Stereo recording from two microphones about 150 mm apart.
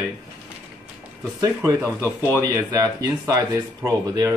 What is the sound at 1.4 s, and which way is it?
Speech, 20° right (ahead or behind).